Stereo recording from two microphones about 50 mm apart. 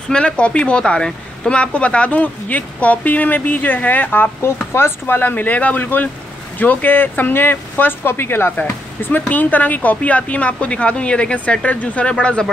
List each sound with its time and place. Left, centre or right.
0.1 s speech: centre; by 4.3 s left
4.4 s speech: left
8.5 s speech: left